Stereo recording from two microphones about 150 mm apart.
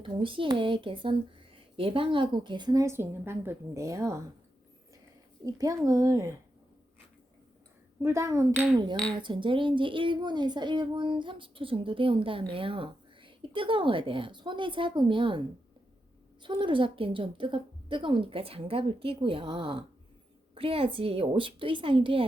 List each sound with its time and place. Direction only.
0.0 s a woman's voice: 35° right (ahead or behind)
5.5 s speech: 25° right (ahead or behind)
8.0 s speech: 20° right (ahead or behind)
9.1 s a woman's voice: 35° right (ahead or behind)
16.4 s a woman's voice: 30° right (ahead or behind)